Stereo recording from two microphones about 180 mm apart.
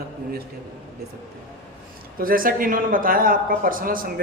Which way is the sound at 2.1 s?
50° right (ahead or behind).